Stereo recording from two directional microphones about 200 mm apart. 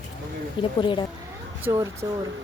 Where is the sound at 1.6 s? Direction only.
15° right (ahead or behind).